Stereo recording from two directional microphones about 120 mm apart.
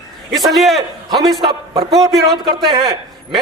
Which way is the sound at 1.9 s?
25° right (ahead or behind).